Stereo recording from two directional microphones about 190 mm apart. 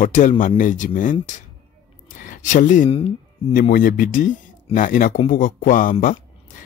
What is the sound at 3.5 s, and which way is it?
Speech, 45° left (ahead or behind).